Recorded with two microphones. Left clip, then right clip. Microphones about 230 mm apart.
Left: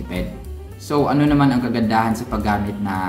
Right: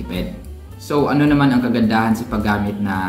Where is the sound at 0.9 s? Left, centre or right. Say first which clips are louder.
Right 1 dB; centre.